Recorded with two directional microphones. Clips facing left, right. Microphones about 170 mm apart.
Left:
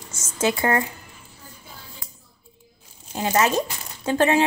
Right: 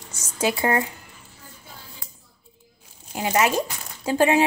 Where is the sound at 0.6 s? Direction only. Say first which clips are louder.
Right 1 dB; 20° right (ahead or behind).